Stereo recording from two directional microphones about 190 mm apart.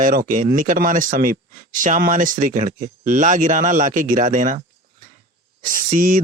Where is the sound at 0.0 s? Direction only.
45° right (ahead or behind).